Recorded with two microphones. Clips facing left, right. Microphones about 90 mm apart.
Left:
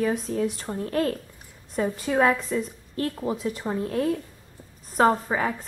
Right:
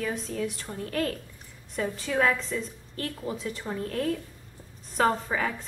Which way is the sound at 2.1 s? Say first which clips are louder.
Left 4 dB; 15° left (ahead or behind).